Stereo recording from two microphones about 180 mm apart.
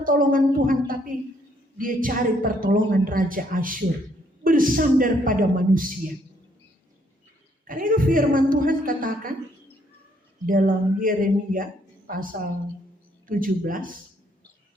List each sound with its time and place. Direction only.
0.0 s a woman's voice: 50° right (ahead or behind)
7.7 s a woman's voice: 50° right (ahead or behind)
10.4 s a woman's voice: 50° right (ahead or behind)